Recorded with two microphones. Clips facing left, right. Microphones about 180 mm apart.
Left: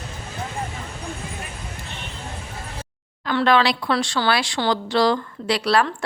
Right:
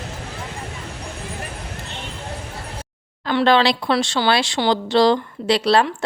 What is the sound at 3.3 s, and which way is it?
A woman's voice, 30° right (ahead or behind).